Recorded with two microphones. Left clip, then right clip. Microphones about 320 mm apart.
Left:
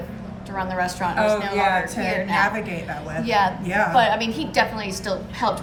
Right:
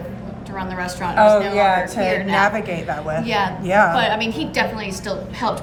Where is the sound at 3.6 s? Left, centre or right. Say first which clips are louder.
Right 7 dB; centre.